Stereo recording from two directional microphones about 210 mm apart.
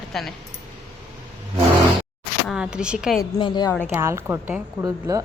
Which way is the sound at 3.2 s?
20° left (ahead or behind).